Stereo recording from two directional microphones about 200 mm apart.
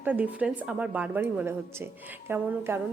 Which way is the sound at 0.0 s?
10° right (ahead or behind).